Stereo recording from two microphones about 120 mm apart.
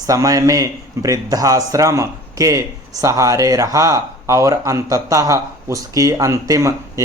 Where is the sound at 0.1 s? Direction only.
30° right (ahead or behind).